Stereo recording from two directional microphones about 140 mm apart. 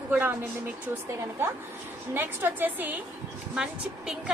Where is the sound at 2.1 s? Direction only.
15° right (ahead or behind).